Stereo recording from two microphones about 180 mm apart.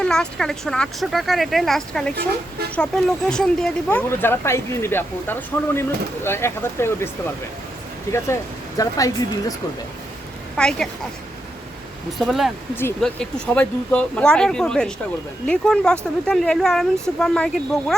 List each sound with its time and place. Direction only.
0.0 s speech: 5° left (ahead or behind)
8.8 s speech: 20° left (ahead or behind)
10.6 s speech: 5° left (ahead or behind)
12.2 s speech: centre (ahead or behind)